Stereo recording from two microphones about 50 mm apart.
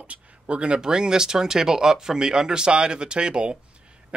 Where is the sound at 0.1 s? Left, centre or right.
Right.